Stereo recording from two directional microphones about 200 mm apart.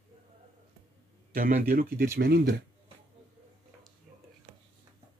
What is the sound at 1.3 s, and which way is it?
Speech, 45° right (ahead or behind).